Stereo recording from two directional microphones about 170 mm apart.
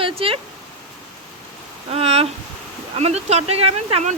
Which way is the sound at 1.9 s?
35° right (ahead or behind).